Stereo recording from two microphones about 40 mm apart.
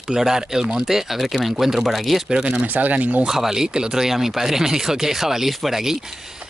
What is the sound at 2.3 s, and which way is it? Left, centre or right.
Speech, right.